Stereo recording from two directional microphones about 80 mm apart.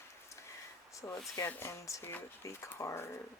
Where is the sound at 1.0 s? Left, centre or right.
Left.